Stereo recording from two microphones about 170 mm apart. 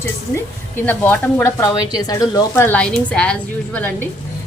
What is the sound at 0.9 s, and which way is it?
A woman's voice, 10° left (ahead or behind).